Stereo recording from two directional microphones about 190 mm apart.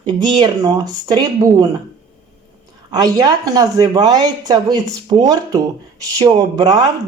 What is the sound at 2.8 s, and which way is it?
Speech, 20° right (ahead or behind).